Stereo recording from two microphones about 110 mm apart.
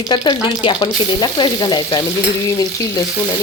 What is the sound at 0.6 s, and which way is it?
A woman's voice, 45° left (ahead or behind).